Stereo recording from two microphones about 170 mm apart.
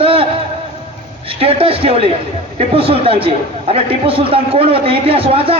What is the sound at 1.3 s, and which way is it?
A man's voice, 35° right (ahead or behind).